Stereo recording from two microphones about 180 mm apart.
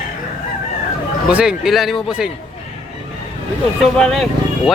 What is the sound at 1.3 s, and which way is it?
Speech, 5° right (ahead or behind).